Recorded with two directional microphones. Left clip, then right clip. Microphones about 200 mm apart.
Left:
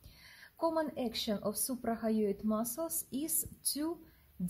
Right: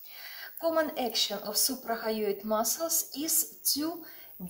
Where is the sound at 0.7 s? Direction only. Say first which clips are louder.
Right 7 dB; 45° left (ahead or behind).